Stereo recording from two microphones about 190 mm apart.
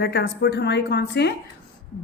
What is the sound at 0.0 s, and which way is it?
A woman's voice, 60° left (ahead or behind).